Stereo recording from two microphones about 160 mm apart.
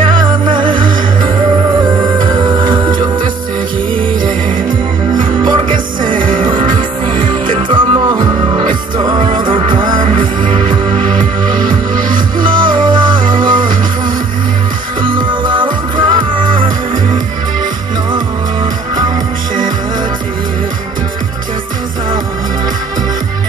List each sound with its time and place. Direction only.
0.0 s music: 30° right (ahead or behind)
4.6 s music: 30° right (ahead or behind)
15.0 s music: 30° right (ahead or behind)